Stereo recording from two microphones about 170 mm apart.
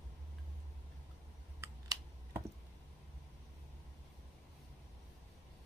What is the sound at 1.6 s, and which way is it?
Computer keyboard, 15° right (ahead or behind).